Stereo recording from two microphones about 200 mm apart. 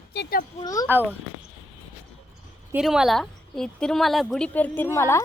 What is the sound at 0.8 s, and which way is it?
Speech, 10° right (ahead or behind).